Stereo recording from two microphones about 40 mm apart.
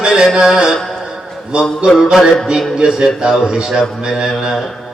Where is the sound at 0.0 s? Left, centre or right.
Centre.